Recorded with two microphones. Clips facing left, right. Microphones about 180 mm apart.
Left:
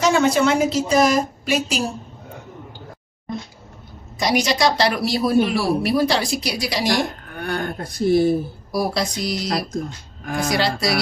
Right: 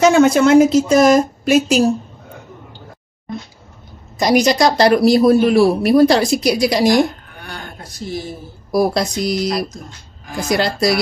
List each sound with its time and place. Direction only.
0.0 s speech: 45° right (ahead or behind)
4.2 s speech: 45° right (ahead or behind)
7.3 s speech: 55° left (ahead or behind)
8.7 s speech: 50° right (ahead or behind)
10.5 s speech: 50° right (ahead or behind)